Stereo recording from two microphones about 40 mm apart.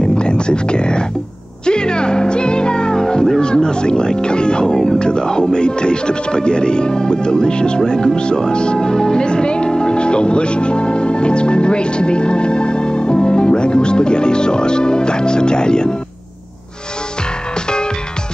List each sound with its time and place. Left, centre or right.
0.0 s music: left
4.9 s speech: left